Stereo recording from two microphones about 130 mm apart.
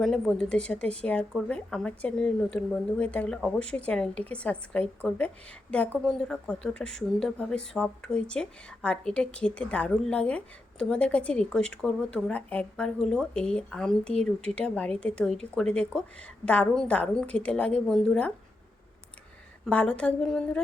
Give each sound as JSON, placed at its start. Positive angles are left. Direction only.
{"t": 0.0, "sound": "speech", "side_deg": 5}
{"t": 19.6, "sound": "speech", "side_deg": 10}